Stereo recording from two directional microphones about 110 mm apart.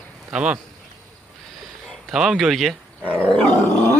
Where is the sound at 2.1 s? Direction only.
5° right (ahead or behind).